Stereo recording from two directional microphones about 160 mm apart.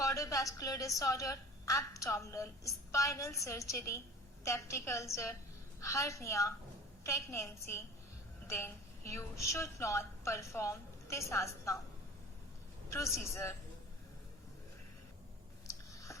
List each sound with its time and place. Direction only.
0.0 s a woman's voice: 20° left (ahead or behind)
12.9 s a woman's voice: 20° left (ahead or behind)
15.6 s a sound: 20° left (ahead or behind)